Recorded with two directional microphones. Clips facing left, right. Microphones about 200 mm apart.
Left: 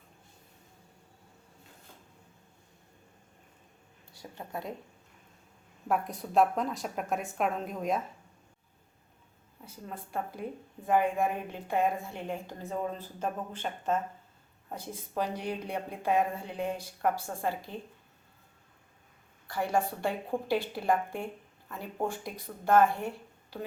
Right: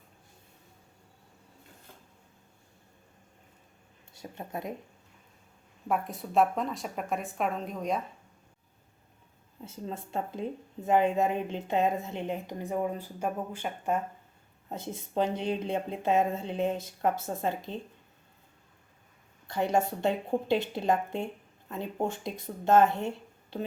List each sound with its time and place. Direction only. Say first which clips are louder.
4.1 s speech: right 2 dB; 20° right (ahead or behind)
5.9 s a woman's voice: even; centre (ahead or behind)
9.6 s a woman's voice: right 5 dB; 25° right (ahead or behind)
14.7 s a woman's voice: right 3 dB; 25° right (ahead or behind)
19.5 s a woman's voice: right 3 dB; 20° right (ahead or behind)